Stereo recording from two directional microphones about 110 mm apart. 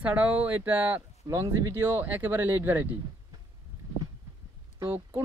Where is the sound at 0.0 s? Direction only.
15° right (ahead or behind).